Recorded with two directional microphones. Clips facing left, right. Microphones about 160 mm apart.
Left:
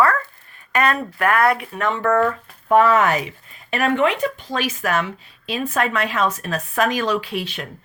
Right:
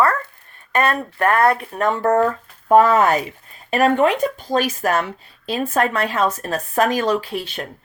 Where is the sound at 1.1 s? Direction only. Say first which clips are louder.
Right 3 dB; 30° right (ahead or behind).